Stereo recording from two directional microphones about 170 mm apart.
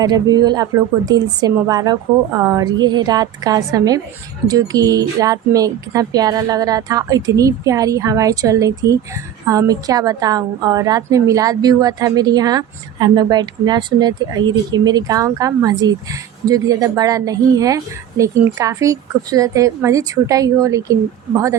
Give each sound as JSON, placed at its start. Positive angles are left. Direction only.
{"t": 0.0, "sound": "a woman's voice", "side_deg": -25}